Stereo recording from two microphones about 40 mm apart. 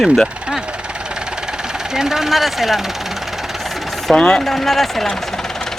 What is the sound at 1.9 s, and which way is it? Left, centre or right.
Speech, centre.